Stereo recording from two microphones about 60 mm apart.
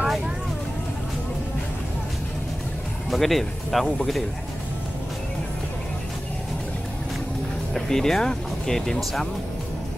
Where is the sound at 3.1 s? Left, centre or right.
Centre.